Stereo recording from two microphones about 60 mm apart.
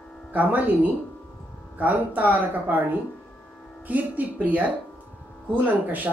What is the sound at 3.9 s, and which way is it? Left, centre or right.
Speech, right.